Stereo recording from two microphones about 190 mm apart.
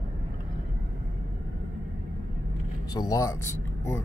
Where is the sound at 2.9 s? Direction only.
15° left (ahead or behind).